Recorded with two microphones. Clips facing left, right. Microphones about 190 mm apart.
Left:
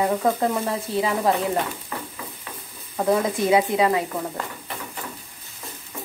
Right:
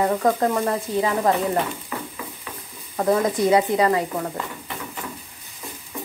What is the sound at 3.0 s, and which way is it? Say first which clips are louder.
Speech: right 1 dB; centre (ahead or behind).